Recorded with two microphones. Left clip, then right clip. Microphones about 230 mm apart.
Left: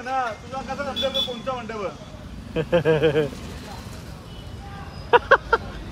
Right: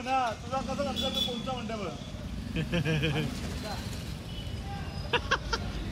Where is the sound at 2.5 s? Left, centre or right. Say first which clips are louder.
Left 13 dB; centre.